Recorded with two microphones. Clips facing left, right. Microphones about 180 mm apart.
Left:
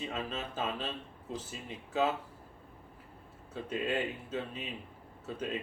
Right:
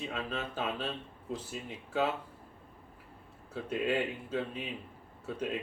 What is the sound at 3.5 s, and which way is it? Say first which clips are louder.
Speech: right 2 dB; centre (ahead or behind).